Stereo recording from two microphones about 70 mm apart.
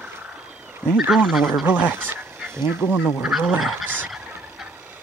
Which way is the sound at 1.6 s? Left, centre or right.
Right.